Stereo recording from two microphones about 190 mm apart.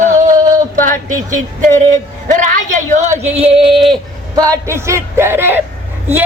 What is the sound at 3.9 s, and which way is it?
Speech, 20° right (ahead or behind).